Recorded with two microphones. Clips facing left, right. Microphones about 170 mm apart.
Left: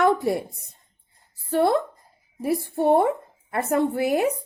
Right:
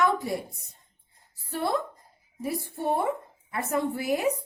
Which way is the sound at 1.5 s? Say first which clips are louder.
Left 8 dB; 60° left (ahead or behind).